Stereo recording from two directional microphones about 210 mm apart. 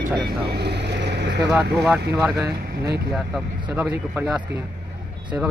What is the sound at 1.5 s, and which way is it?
Speech, 5° right (ahead or behind).